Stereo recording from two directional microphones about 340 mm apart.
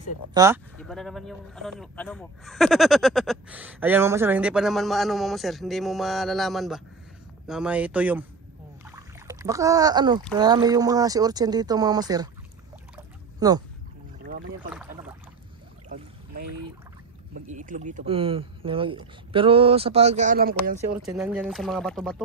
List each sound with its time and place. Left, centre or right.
0.3 s speech: centre
0.7 s speech: centre
8.8 s splash: centre
10.3 s speech: centre
12.9 s a sound: centre
14.2 s speech: right
17.3 s speech: right
21.0 s speech: centre